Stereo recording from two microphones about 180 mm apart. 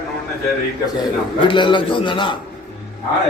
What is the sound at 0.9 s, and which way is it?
A man's voice, 25° left (ahead or behind).